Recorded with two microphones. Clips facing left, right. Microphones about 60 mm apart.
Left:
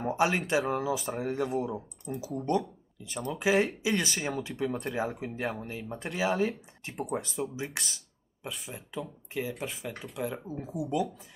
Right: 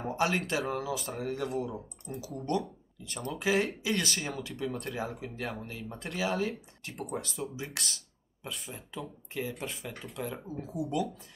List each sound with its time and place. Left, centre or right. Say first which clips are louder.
0.0 s speech: left 3 dB; centre
4.6 s speech: left 3 dB; centre